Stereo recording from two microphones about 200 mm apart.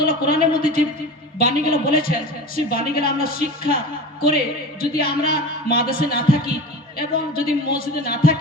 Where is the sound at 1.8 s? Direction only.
45° left (ahead or behind).